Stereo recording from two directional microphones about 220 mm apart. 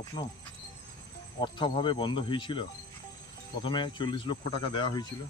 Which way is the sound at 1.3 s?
20° left (ahead or behind).